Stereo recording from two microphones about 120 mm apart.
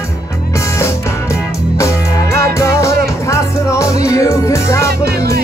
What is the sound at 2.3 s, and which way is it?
Music, 25° left (ahead or behind).